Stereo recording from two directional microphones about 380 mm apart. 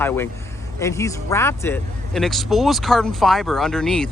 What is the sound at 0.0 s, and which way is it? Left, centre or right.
Speech, centre.